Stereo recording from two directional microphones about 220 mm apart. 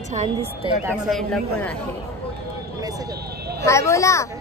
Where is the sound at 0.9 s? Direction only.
Centre (ahead or behind).